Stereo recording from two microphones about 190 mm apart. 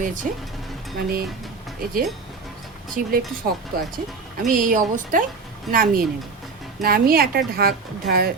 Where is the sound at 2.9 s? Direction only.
50° right (ahead or behind).